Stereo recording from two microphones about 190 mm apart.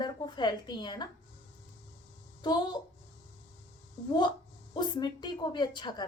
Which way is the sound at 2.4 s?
20° left (ahead or behind).